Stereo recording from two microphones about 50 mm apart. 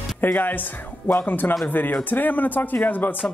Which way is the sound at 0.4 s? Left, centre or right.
Left.